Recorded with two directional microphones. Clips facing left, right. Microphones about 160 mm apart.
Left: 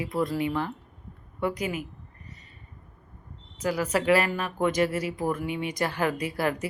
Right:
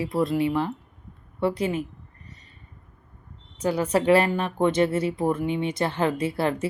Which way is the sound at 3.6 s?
30° right (ahead or behind).